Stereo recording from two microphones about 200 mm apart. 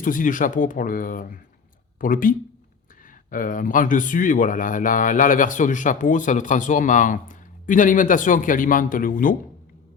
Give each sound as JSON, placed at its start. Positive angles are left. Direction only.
{"t": 0.0, "sound": "speech", "side_deg": 40}